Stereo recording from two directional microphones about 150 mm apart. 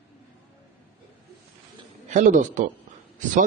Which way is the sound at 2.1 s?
55° right (ahead or behind).